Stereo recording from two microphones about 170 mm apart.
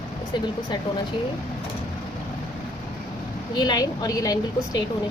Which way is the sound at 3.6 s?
25° left (ahead or behind).